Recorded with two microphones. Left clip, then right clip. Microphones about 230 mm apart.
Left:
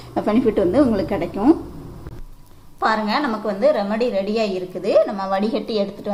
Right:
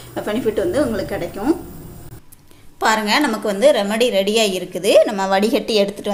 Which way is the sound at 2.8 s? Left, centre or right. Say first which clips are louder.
Right 3 dB; right.